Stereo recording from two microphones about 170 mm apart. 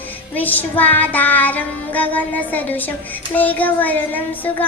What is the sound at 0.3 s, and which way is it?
A woman's voice, 10° left (ahead or behind).